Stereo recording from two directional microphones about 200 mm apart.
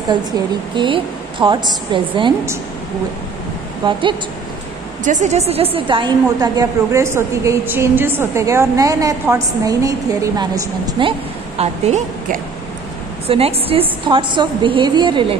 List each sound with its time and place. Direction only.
0.7 s a woman's voice: 25° right (ahead or behind)
5.0 s a woman's voice: 40° right (ahead or behind)